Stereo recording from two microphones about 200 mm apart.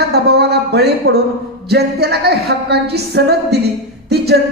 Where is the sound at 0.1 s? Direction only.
55° right (ahead or behind).